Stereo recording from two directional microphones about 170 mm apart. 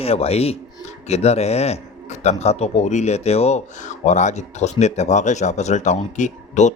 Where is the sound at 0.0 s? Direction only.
35° left (ahead or behind).